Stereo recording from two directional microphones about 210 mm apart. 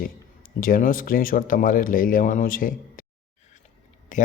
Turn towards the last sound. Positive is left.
turn(degrees=35)  # may be behind; listen again after turning